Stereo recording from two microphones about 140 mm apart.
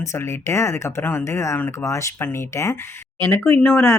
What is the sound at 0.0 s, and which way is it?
Speech, 20° left (ahead or behind).